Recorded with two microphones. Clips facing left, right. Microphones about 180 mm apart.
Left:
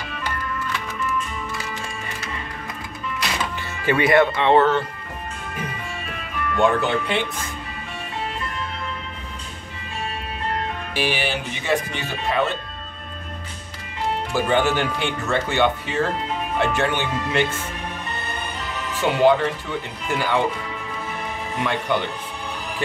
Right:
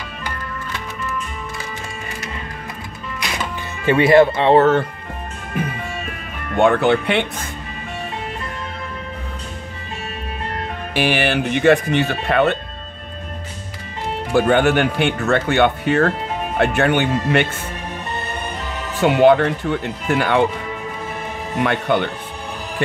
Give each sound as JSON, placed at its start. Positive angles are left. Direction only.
{"t": 3.8, "sound": "speech", "side_deg": -25}
{"t": 6.5, "sound": "speech", "side_deg": -60}
{"t": 11.0, "sound": "speech", "side_deg": -65}
{"t": 14.3, "sound": "speech", "side_deg": -60}
{"t": 18.9, "sound": "speech", "side_deg": -60}
{"t": 21.6, "sound": "speech", "side_deg": -60}